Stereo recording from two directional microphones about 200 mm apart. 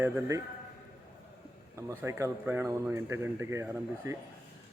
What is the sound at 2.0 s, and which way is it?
Speech, 15° right (ahead or behind).